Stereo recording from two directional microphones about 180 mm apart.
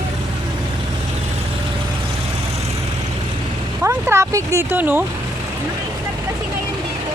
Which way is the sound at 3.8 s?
15° right (ahead or behind).